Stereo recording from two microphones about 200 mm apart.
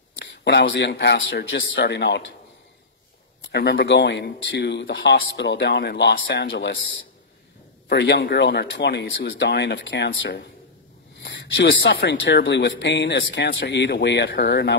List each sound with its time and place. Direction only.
0.2 s speech: 55° left (ahead or behind)
3.4 s speech: 55° left (ahead or behind)
7.9 s speech: 60° left (ahead or behind)